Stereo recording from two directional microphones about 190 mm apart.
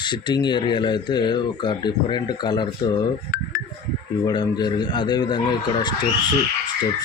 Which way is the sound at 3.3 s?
45° left (ahead or behind).